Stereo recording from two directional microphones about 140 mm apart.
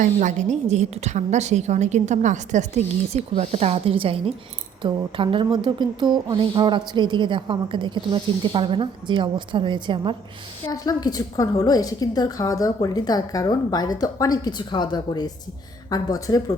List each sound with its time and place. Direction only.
0.0 s a woman's voice: 60° right (ahead or behind); by 10.2 s 35° right (ahead or behind)
10.7 s a woman's voice: 25° left (ahead or behind)